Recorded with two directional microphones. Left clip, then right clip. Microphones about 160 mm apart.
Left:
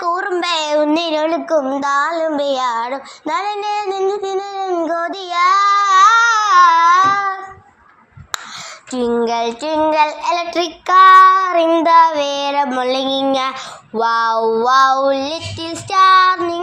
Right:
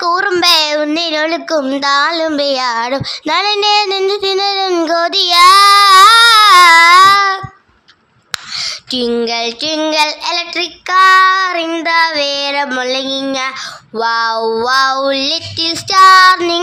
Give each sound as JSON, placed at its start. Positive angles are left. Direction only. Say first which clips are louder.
{"t": 0.0, "sound": "a sound", "louder": "right 6 dB", "side_deg": -20}
{"t": 0.6, "sound": "child singing", "louder": "right 1 dB", "side_deg": 0}
{"t": 1.8, "sound": "child singing", "louder": "right 4 dB", "side_deg": -10}
{"t": 3.5, "sound": "child singing", "louder": "right 8 dB", "side_deg": -25}
{"t": 6.3, "sound": "a sound", "louder": "right 6 dB", "side_deg": -15}
{"t": 8.3, "sound": "a sound", "louder": "right 7 dB", "side_deg": -10}
{"t": 9.2, "sound": "child singing", "louder": "right 2 dB", "side_deg": 5}
{"t": 10.5, "sound": "child singing", "louder": "left 2 dB", "side_deg": 15}
{"t": 12.8, "sound": "child singing", "louder": "even", "side_deg": 10}